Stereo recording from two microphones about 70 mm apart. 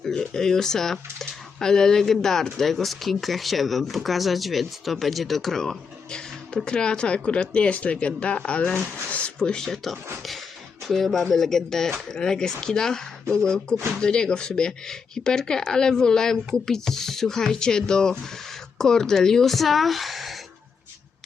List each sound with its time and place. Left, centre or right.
0.0 s speech: centre
9.0 s a sound: centre
9.4 s speech: centre